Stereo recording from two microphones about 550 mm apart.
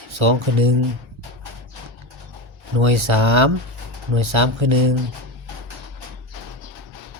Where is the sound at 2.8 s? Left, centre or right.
Right.